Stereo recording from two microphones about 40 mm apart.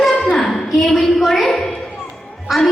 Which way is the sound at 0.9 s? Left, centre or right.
Centre.